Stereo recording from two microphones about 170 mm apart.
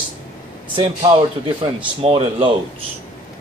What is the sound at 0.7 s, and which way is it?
Speech, 30° right (ahead or behind).